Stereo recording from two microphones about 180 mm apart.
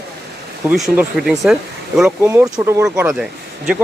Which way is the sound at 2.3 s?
20° right (ahead or behind).